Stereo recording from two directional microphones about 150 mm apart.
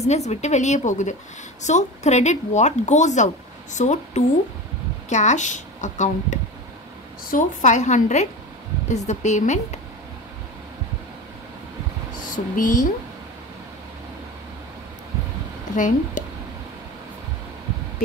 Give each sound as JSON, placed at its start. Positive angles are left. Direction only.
{"t": 0.0, "sound": "a woman's voice", "side_deg": 45}
{"t": 12.3, "sound": "speech", "side_deg": 60}
{"t": 15.7, "sound": "speech", "side_deg": 55}